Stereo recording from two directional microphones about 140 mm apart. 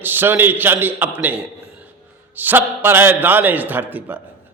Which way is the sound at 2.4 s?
15° right (ahead or behind).